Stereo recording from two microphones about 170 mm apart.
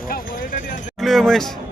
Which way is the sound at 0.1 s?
60° left (ahead or behind).